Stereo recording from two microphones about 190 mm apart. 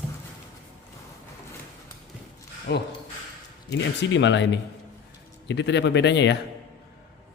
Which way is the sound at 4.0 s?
70° left (ahead or behind).